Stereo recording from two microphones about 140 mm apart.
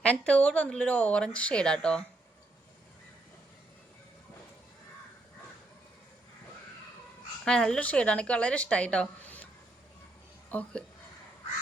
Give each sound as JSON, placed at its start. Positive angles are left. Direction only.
{"t": 0.0, "sound": "speech", "side_deg": 10}
{"t": 7.4, "sound": "speech", "side_deg": 5}
{"t": 10.5, "sound": "speech", "side_deg": 10}